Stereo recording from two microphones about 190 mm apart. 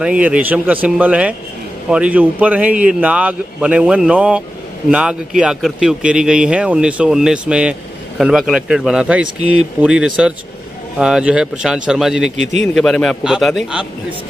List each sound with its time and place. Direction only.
0.0 s a man's voice: 5° right (ahead or behind)